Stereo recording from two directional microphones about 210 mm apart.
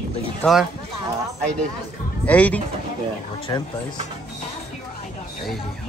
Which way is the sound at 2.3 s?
5° left (ahead or behind).